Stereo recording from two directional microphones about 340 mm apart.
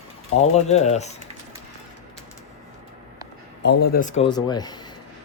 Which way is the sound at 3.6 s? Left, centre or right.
Left.